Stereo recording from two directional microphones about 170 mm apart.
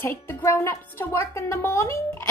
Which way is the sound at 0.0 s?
15° left (ahead or behind).